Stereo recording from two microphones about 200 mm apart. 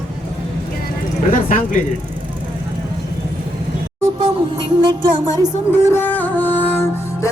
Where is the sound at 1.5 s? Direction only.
40° left (ahead or behind).